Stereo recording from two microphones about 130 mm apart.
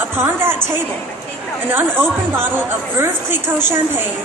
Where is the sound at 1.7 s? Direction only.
15° right (ahead or behind).